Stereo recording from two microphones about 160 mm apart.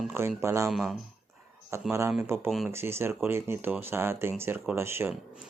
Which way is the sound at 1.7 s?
15° right (ahead or behind).